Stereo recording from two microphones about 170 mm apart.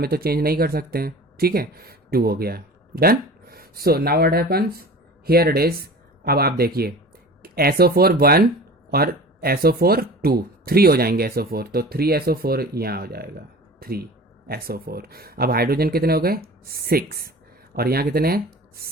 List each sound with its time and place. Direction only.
0.0 s speech: 65° right (ahead or behind)